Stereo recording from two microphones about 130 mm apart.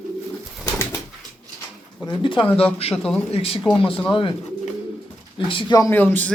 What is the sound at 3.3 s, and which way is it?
Speech, 50° left (ahead or behind).